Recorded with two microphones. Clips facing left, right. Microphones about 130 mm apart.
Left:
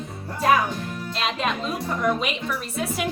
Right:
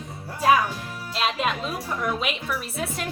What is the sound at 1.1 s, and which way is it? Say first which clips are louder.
A woman's voice: right 1 dB; 5° right (ahead or behind).